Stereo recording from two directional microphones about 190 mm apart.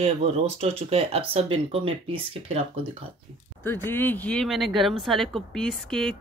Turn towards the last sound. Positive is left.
turn(degrees=0)  # may be behind; listen again after turning